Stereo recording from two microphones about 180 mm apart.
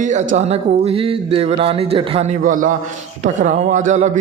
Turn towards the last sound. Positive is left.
turn(degrees=-40)  # may be behind; listen again after turning